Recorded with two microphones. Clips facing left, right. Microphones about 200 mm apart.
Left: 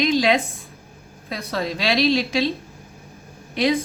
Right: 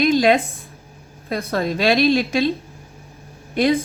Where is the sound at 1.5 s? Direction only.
50° right (ahead or behind).